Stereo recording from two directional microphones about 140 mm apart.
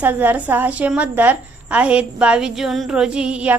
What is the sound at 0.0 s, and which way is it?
A woman's voice, 15° right (ahead or behind).